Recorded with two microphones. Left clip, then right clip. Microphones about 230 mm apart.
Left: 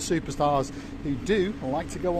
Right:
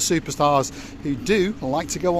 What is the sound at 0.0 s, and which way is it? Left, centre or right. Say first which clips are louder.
Speech: right 5 dB; right.